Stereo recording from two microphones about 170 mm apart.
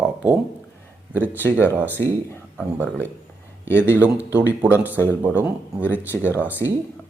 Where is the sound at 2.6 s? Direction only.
10° right (ahead or behind).